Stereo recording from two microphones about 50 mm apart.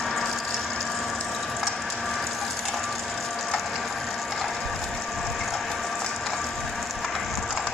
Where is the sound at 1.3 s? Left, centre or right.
Centre.